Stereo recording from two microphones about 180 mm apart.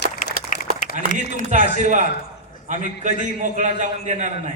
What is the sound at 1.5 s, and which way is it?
A man's voice, 45° right (ahead or behind).